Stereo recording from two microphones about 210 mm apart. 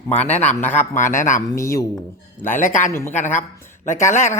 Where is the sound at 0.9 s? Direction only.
35° left (ahead or behind).